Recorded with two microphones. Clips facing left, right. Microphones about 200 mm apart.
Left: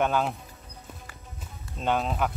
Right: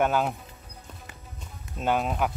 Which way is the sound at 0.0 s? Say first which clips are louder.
Right 1 dB; 5° right (ahead or behind).